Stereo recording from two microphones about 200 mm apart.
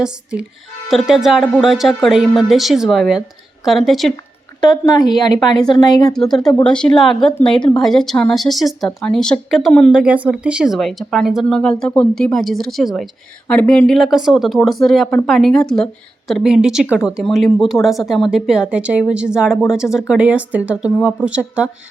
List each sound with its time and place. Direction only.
0.0 s speech: 5° right (ahead or behind)
4.6 s speech: 20° left (ahead or behind)
6.1 s speech: centre (ahead or behind)